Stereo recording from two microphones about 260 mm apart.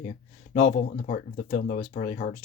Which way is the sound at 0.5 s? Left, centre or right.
Left.